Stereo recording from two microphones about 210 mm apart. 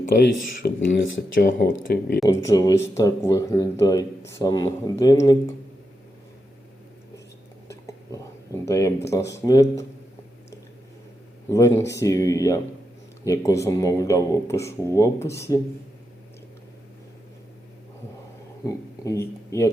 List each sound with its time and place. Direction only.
0.6 s speech: 60° left (ahead or behind)
1.4 s speech: 40° left (ahead or behind)
2.2 s speech: 15° left (ahead or behind)
7.7 s a sound: 15° left (ahead or behind)
9.3 s speech: 15° left (ahead or behind)
11.4 s speech: 15° left (ahead or behind)
18.6 s speech: 15° left (ahead or behind)